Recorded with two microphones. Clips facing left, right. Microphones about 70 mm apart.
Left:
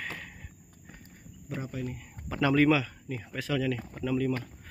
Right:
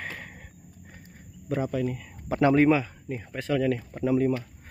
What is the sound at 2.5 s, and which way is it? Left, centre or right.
Speech, right.